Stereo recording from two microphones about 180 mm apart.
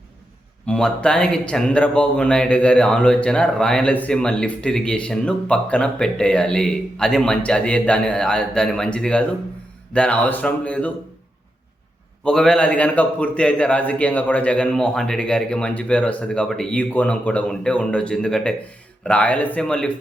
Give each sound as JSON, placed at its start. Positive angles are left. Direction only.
{"t": 0.6, "sound": "a man's voice", "side_deg": 5}
{"t": 12.2, "sound": "a man's voice", "side_deg": 5}